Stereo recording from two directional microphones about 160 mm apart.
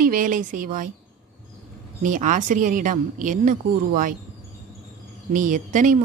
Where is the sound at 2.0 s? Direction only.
55° right (ahead or behind).